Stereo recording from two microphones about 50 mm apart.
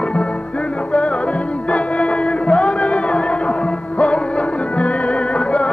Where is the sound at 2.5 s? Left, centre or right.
Left.